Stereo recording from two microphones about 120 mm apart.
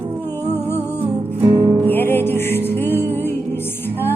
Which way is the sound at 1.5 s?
50° right (ahead or behind).